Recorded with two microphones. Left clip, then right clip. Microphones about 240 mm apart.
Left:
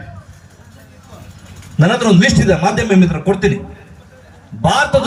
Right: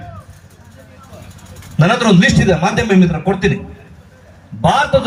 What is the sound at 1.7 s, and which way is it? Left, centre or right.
A man's voice, left.